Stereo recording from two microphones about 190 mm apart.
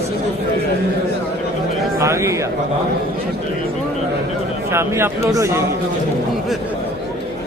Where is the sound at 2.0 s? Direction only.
15° right (ahead or behind).